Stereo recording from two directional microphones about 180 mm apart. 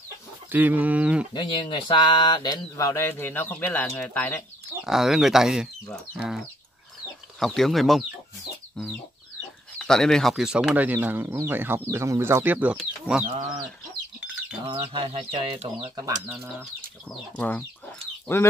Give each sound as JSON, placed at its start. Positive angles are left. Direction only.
{"t": 0.5, "sound": "speech", "side_deg": -10}
{"t": 1.3, "sound": "speech", "side_deg": 25}
{"t": 4.8, "sound": "speech", "side_deg": 0}
{"t": 9.8, "sound": "speech", "side_deg": 5}
{"t": 13.1, "sound": "speech", "side_deg": 10}
{"t": 14.7, "sound": "speech", "side_deg": -30}
{"t": 16.3, "sound": "speech", "side_deg": -10}
{"t": 17.4, "sound": "speech", "side_deg": 10}